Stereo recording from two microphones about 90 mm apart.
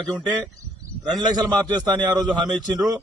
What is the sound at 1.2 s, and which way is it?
Speech, 50° right (ahead or behind).